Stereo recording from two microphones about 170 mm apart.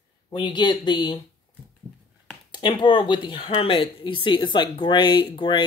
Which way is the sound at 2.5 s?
25° left (ahead or behind).